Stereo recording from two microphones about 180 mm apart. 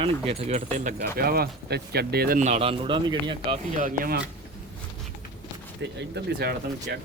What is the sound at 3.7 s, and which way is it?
Speech, 50° right (ahead or behind).